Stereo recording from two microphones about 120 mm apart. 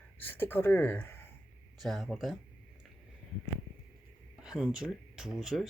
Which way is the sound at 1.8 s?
Centre (ahead or behind).